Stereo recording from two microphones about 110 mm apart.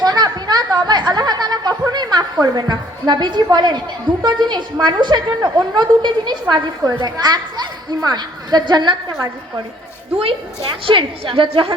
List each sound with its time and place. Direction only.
0.0 s chatter: 40° right (ahead or behind)
3.5 s a woman's voice: 40° right (ahead or behind)
10.7 s a woman's voice: 50° right (ahead or behind)